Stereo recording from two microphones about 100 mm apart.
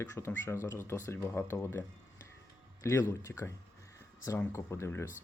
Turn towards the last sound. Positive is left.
turn(degrees=30)  # may be behind; listen again after turning